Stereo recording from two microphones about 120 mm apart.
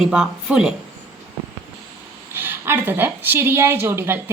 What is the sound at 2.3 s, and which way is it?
A woman's voice, 20° right (ahead or behind).